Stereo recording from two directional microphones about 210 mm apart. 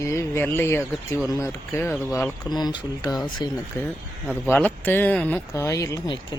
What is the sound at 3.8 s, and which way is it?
Speech, 15° left (ahead or behind).